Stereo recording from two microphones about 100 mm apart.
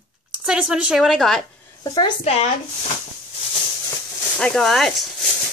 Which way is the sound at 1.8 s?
40° left (ahead or behind).